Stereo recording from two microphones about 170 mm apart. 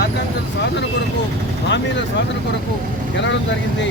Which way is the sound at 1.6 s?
90° left.